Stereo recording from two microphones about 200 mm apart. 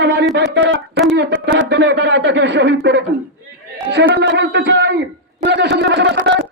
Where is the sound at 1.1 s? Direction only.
60° right (ahead or behind).